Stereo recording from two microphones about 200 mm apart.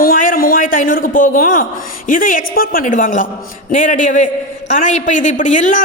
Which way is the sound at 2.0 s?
40° left (ahead or behind).